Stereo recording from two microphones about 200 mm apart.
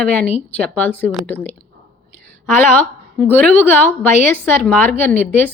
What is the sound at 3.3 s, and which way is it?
Speech, 10° left (ahead or behind).